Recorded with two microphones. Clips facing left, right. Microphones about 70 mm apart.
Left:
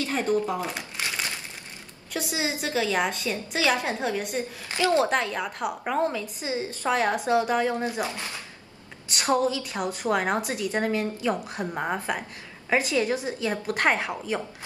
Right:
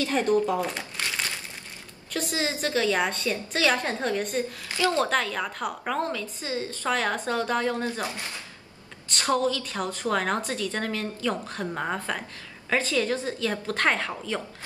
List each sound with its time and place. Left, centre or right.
0.5 s speech: centre
2.1 s a woman's voice: centre
4.6 s a woman's voice: left
9.1 s a woman's voice: centre